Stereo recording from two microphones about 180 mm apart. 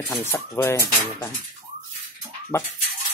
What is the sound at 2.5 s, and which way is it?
Speech, 15° left (ahead or behind).